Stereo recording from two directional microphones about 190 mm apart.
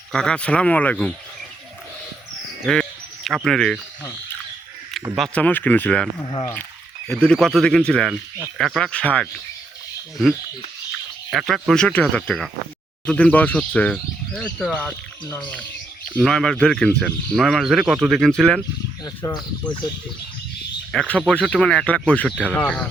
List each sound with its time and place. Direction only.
0.1 s speech: 5° left (ahead or behind)
3.2 s speech: centre (ahead or behind)
5.1 s speech: 5° left (ahead or behind)
7.1 s speech: 5° left (ahead or behind)
11.3 s speech: centre (ahead or behind)
19.0 s speech: 20° left (ahead or behind)
20.9 s speech: 5° left (ahead or behind)